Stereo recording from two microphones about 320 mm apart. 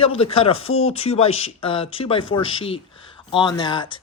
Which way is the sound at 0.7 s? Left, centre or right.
Left.